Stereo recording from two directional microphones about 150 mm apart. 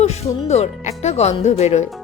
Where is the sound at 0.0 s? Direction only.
45° left (ahead or behind).